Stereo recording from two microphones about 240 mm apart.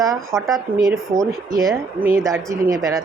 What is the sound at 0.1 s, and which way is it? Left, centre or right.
Speech, centre.